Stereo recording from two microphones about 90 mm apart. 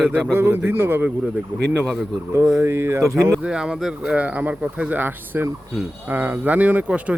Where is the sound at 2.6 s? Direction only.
30° right (ahead or behind).